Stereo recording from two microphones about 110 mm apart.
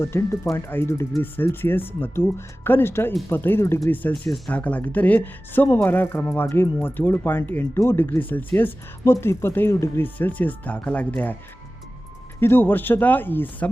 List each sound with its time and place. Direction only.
0.0 s speech: 25° left (ahead or behind)
12.4 s speech: 20° left (ahead or behind)